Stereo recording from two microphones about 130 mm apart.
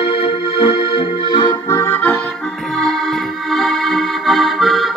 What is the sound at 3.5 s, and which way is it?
Accordion, 5° left (ahead or behind).